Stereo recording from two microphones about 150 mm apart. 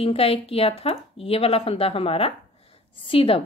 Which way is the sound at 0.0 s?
40° left (ahead or behind).